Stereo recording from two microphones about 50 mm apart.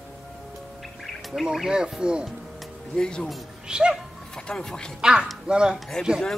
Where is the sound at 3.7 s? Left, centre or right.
Centre.